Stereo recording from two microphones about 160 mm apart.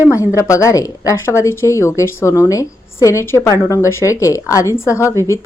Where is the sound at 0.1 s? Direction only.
20° left (ahead or behind).